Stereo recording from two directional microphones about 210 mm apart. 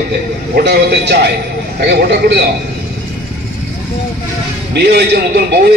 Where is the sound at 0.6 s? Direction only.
50° right (ahead or behind).